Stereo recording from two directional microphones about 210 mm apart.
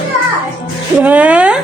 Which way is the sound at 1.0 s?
5° right (ahead or behind).